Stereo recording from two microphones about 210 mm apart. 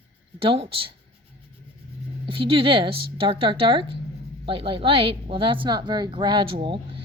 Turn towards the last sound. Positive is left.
turn(degrees=-25)  # may be behind; listen again after turning